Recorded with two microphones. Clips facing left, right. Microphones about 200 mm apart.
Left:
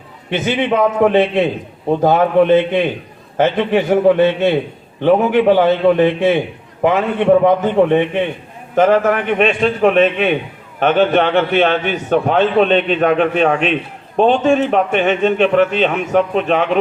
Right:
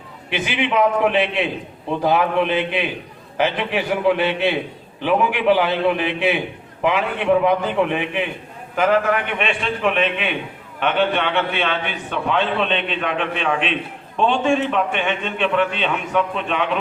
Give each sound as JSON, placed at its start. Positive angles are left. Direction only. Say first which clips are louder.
{"t": 0.3, "sound": "a man's voice", "louder": "left 4 dB", "side_deg": 45}
{"t": 5.5, "sound": "a man's voice", "louder": "left 7 dB", "side_deg": 45}